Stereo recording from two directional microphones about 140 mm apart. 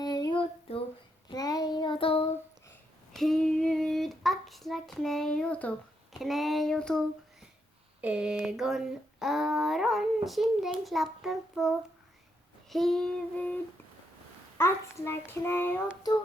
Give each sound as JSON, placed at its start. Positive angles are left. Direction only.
{"t": 0.0, "sound": "child singing", "side_deg": 30}
{"t": 1.3, "sound": "child singing", "side_deg": 25}
{"t": 3.1, "sound": "child singing", "side_deg": 0}
{"t": 6.2, "sound": "speech", "side_deg": 0}
{"t": 8.0, "sound": "speech", "side_deg": -5}
{"t": 12.7, "sound": "speech", "side_deg": 0}
{"t": 14.6, "sound": "a child's voice", "side_deg": 20}